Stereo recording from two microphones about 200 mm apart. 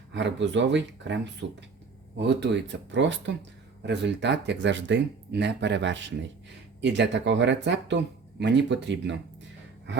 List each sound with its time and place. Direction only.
0.1 s speech: 65° right (ahead or behind)